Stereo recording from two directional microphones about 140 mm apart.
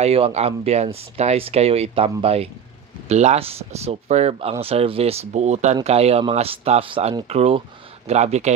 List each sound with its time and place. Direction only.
0.0 s speech: 45° right (ahead or behind)